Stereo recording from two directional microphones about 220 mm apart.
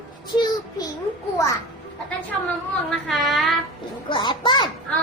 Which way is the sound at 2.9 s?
Centre (ahead or behind).